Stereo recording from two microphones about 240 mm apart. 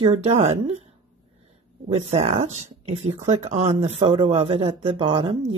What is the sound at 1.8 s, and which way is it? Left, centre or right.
Speech, right.